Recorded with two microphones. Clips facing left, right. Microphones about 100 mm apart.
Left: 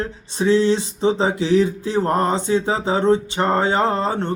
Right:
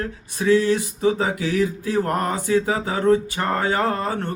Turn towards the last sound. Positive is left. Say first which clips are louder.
# left 3 dB
turn(degrees=25)  # may be behind; listen again after turning